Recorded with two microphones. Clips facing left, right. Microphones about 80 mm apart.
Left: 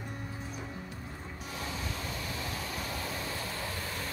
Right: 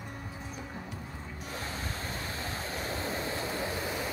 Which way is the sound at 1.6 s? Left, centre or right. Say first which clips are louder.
Left 1 dB; right.